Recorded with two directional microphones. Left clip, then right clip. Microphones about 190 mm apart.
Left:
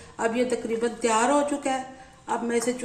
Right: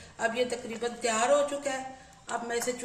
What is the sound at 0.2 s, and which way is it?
Speech, 50° left (ahead or behind).